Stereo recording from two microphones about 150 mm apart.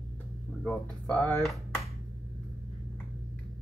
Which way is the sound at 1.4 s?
Centre (ahead or behind).